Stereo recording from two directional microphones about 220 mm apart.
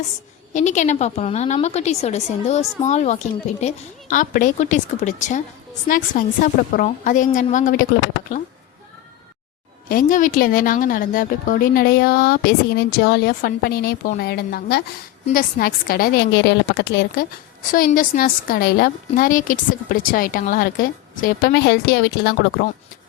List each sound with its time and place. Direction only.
0.5 s a woman's voice: 35° left (ahead or behind)
9.9 s a woman's voice: 35° left (ahead or behind)